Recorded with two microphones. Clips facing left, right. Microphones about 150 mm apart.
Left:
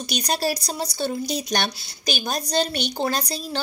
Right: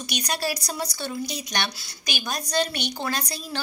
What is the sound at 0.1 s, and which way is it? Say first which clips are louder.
Speech: left 4 dB; 30° left (ahead or behind).